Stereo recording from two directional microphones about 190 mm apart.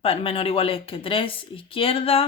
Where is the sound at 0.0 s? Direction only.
30° left (ahead or behind).